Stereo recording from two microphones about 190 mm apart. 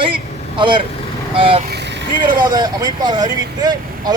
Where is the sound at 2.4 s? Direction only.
20° right (ahead or behind).